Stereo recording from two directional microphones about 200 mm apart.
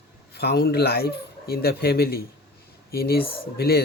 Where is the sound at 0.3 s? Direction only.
55° left (ahead or behind).